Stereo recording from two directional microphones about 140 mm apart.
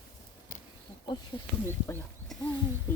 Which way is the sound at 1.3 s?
40° left (ahead or behind).